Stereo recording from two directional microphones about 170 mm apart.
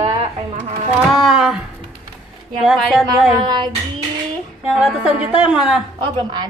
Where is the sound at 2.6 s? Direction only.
Centre (ahead or behind).